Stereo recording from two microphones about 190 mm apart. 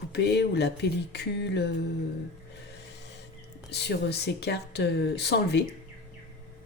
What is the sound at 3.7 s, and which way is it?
A woman's voice, 60° left (ahead or behind).